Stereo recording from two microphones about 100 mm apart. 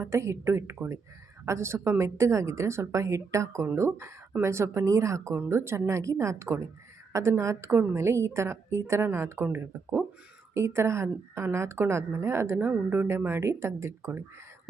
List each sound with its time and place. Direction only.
0.0 s a woman's voice: 30° right (ahead or behind)